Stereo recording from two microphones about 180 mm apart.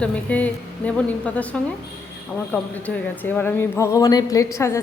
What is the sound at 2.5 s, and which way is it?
Speech, 10° left (ahead or behind).